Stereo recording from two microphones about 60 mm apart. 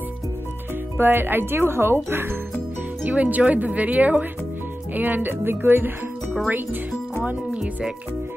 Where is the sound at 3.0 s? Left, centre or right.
Right.